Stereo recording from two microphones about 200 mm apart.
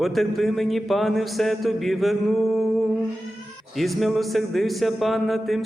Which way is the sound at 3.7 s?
Centre (ahead or behind).